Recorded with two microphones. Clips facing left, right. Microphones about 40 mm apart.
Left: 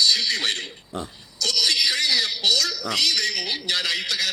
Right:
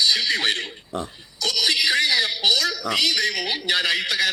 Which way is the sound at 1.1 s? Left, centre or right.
Centre.